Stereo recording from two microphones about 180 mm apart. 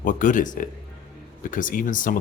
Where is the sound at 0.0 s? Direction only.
45° left (ahead or behind).